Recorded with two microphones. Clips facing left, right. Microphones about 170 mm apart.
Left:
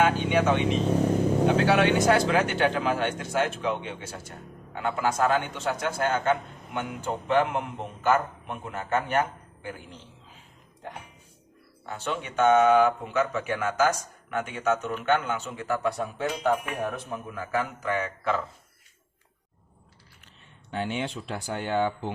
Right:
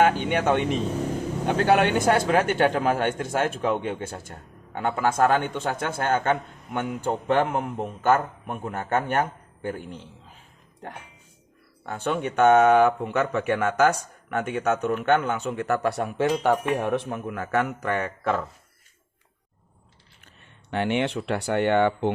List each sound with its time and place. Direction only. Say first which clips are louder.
0.0 s speech: right 2 dB; 55° right (ahead or behind)
11.9 s speech: right 5 dB; 55° right (ahead or behind)
20.7 s speech: right 6 dB; 70° right (ahead or behind)